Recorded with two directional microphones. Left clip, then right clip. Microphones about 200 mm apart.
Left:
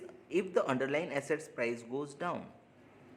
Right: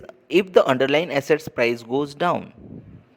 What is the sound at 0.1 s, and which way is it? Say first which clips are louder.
Speech: right 15 dB; 40° right (ahead or behind).